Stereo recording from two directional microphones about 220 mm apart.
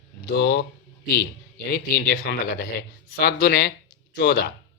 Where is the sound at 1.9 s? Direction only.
45° left (ahead or behind).